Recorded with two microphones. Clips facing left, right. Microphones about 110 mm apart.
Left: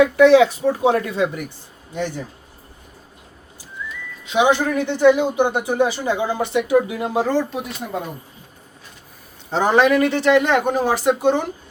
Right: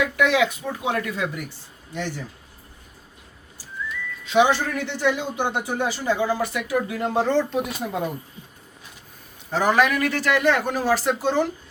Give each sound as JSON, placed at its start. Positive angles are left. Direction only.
{"t": 0.0, "sound": "speech", "side_deg": 30}
{"t": 2.0, "sound": "speech", "side_deg": 15}
{"t": 4.3, "sound": "speech", "side_deg": 15}
{"t": 6.9, "sound": "speech", "side_deg": 10}
{"t": 9.5, "sound": "speech", "side_deg": 25}